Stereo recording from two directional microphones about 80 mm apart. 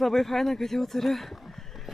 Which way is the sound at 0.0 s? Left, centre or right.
Centre.